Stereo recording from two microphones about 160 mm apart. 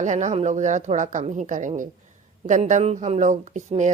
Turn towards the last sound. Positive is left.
turn(degrees=-50)  # may be behind; listen again after turning